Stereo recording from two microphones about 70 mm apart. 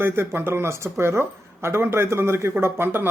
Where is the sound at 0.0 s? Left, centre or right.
Right.